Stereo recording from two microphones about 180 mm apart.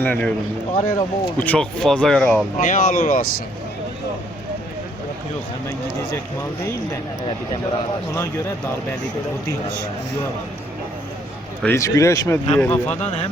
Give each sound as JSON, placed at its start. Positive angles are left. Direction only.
{"t": 0.0, "sound": "speech", "side_deg": 10}
{"t": 2.6, "sound": "speech", "side_deg": 50}
{"t": 8.1, "sound": "speech", "side_deg": 15}
{"t": 11.6, "sound": "speech", "side_deg": 15}
{"t": 12.9, "sound": "a man's voice", "side_deg": 40}